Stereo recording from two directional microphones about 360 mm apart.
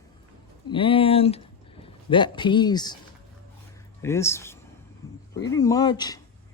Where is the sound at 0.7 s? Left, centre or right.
Centre.